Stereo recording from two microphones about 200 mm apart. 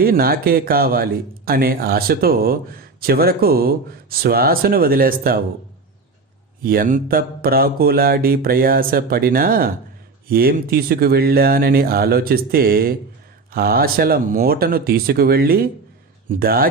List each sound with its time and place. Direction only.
0.0 s speech: 50° right (ahead or behind)
6.6 s speech: 45° right (ahead or behind)